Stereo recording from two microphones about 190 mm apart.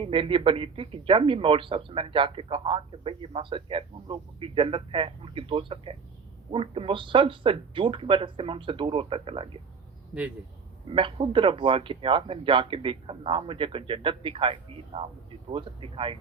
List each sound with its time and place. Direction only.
0.0 s speech: 25° right (ahead or behind)
10.8 s speech: 30° right (ahead or behind)